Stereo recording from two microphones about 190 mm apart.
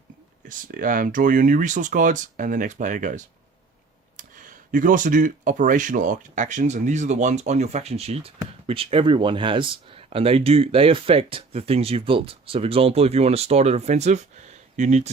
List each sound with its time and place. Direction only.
0.4 s speech: 45° right (ahead or behind)
4.2 s a sound: 40° right (ahead or behind)
4.7 s speech: 45° right (ahead or behind)